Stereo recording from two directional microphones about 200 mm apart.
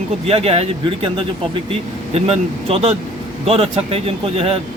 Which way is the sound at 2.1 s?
30° right (ahead or behind).